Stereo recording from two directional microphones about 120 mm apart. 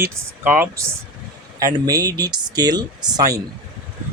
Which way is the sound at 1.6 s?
30° right (ahead or behind).